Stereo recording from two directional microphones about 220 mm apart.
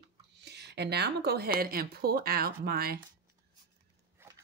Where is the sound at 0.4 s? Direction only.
50° right (ahead or behind).